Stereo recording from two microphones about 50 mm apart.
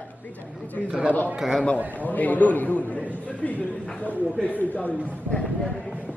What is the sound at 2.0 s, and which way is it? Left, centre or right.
Speech, left.